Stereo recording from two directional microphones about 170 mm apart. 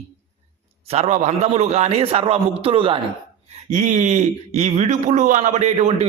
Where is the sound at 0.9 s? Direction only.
40° right (ahead or behind).